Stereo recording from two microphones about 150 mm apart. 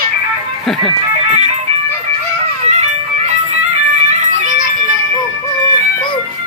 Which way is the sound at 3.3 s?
50° right (ahead or behind).